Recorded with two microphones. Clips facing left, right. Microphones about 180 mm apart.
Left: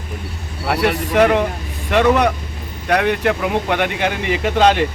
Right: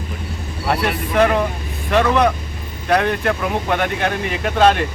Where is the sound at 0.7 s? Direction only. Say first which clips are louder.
Left 2 dB; 10° left (ahead or behind).